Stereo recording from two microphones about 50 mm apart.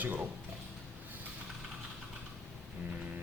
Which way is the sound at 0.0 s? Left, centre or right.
Right.